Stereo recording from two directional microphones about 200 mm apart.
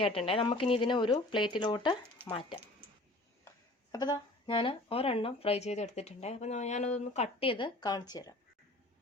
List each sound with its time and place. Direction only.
0.3 s speech: 30° left (ahead or behind)
2.2 s speech: 10° right (ahead or behind)
3.9 s speech: 20° left (ahead or behind)